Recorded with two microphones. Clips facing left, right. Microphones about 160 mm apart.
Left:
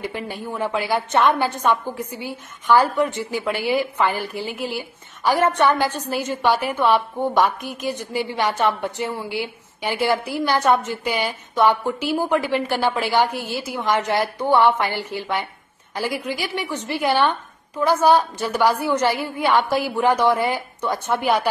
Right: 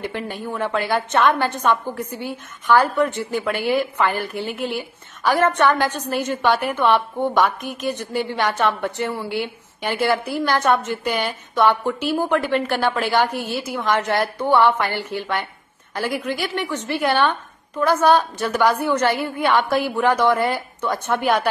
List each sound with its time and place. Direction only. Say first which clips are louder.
0.1 s a woman's voice: right 1 dB; 10° left (ahead or behind)
3.2 s a woman's voice: right 2 dB; 55° right (ahead or behind)
3.4 s a woman's voice: even; 10° left (ahead or behind)
4.2 s a woman's voice: right 1 dB; 60° right (ahead or behind)
4.7 s a woman's voice: right 2 dB; 10° left (ahead or behind)
7.6 s a woman's voice: right 1 dB; 60° right (ahead or behind)
8.1 s a woman's voice: even; 15° left (ahead or behind)